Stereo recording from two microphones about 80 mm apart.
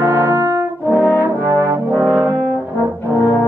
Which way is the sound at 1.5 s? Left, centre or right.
Right.